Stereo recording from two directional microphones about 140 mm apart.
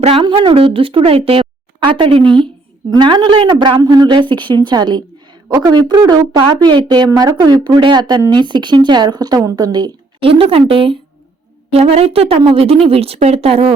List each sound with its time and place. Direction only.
0.0 s a woman's voice: 40° right (ahead or behind)